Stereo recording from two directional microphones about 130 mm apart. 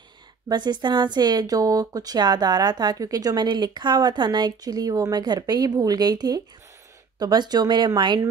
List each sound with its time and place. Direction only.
0.5 s speech: 35° right (ahead or behind)